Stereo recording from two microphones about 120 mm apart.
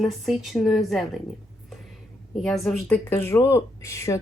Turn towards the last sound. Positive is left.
turn(degrees=25)  # may be behind; listen again after turning